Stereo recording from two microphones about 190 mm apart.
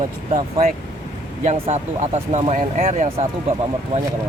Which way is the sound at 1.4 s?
35° right (ahead or behind).